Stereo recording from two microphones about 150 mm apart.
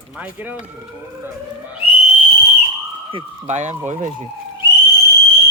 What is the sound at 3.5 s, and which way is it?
Speech, 50° right (ahead or behind).